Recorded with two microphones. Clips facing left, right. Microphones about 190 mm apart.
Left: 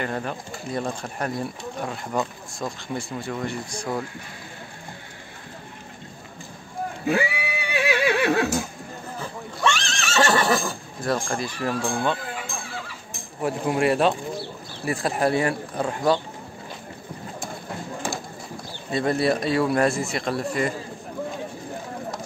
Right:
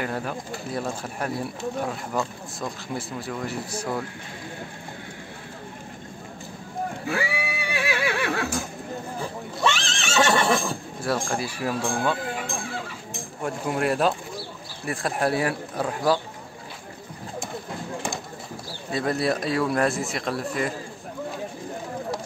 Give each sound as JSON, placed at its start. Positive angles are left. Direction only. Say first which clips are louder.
{"t": 0.0, "sound": "speech", "louder": "left 1 dB", "side_deg": -5}
{"t": 2.6, "sound": "speech", "louder": "left 2 dB", "side_deg": -5}
{"t": 7.1, "sound": "neigh", "louder": "left 6 dB", "side_deg": 20}
{"t": 9.6, "sound": "neigh", "louder": "left 1 dB", "side_deg": 0}
{"t": 13.4, "sound": "speech", "louder": "left 3 dB", "side_deg": 5}
{"t": 18.9, "sound": "speech", "louder": "left 2 dB", "side_deg": 0}